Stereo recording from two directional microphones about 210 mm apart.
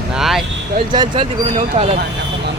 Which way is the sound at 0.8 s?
20° right (ahead or behind).